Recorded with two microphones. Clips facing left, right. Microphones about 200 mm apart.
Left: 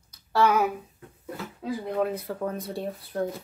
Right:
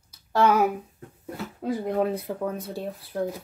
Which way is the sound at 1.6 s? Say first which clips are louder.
Right 3 dB; 40° right (ahead or behind).